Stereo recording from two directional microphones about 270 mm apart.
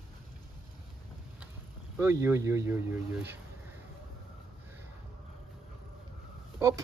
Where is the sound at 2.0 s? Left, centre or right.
Centre.